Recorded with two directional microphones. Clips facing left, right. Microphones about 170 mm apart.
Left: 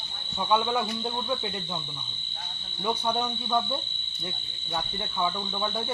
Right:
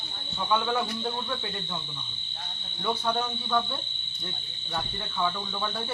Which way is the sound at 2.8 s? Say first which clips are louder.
Left 1 dB; 15° left (ahead or behind).